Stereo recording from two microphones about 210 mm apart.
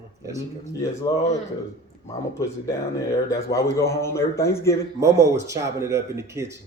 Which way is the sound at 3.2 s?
15° left (ahead or behind).